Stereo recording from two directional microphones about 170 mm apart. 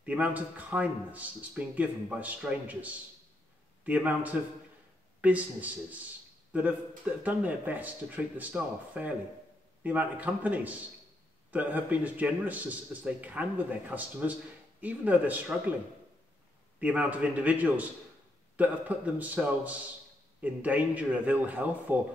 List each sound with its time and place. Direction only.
0.0 s a man's voice: 10° right (ahead or behind)
7.2 s a man's voice: 10° right (ahead or behind)
16.8 s a man's voice: 10° right (ahead or behind)